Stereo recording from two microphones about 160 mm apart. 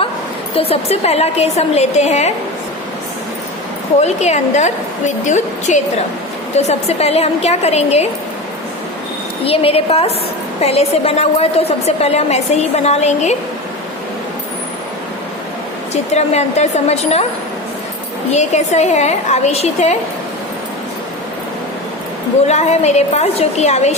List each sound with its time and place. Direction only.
0.5 s a woman's voice: 35° left (ahead or behind)
4.0 s a woman's voice: 45° left (ahead or behind)
9.4 s a woman's voice: 35° left (ahead or behind)
16.1 s a woman's voice: 45° left (ahead or behind)
18.3 s a woman's voice: 45° left (ahead or behind)
22.4 s a woman's voice: 45° left (ahead or behind)